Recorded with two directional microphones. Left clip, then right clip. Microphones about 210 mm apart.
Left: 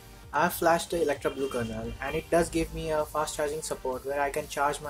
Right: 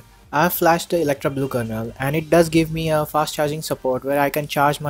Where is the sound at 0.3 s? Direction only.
30° right (ahead or behind).